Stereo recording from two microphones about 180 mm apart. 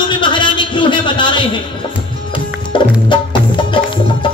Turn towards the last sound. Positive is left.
turn(degrees=25)  # may be behind; listen again after turning